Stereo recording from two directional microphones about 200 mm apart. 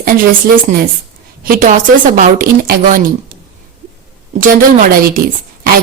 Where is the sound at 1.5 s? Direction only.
40° right (ahead or behind).